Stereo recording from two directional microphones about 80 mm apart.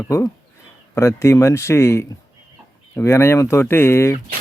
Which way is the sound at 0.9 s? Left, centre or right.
Left.